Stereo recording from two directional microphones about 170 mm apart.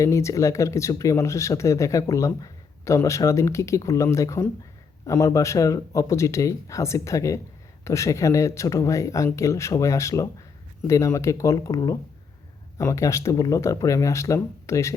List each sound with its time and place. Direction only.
0.0 s speech: 15° left (ahead or behind)